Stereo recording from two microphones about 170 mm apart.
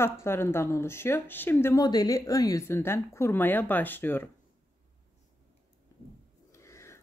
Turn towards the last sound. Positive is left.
turn(degrees=15)  # may be behind; listen again after turning